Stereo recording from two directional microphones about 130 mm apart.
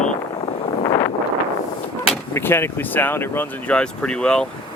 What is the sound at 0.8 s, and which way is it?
Wind, 35° left (ahead or behind).